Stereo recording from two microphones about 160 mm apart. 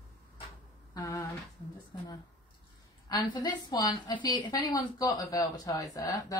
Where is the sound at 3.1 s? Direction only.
30° left (ahead or behind).